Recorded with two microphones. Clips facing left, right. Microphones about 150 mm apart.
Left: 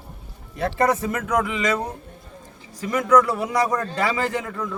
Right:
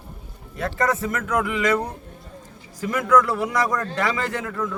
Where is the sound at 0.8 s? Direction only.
25° left (ahead or behind).